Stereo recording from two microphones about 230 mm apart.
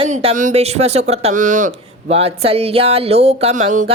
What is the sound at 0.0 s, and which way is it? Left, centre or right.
Speech, right.